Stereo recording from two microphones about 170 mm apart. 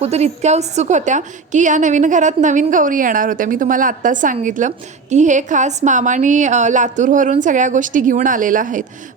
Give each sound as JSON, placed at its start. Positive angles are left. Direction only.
{"t": 0.0, "sound": "a woman's voice", "side_deg": -40}